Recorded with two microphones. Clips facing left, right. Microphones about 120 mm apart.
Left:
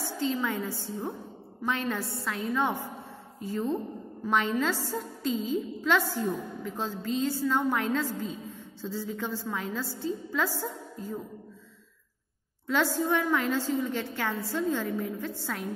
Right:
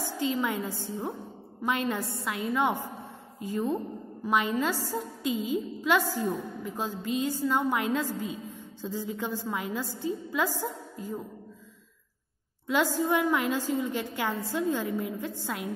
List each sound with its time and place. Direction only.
0.0 s a woman's voice: 15° right (ahead or behind)
12.6 s a woman's voice: 15° right (ahead or behind)